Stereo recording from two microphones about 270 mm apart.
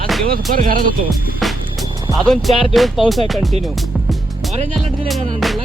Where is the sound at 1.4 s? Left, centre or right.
Centre.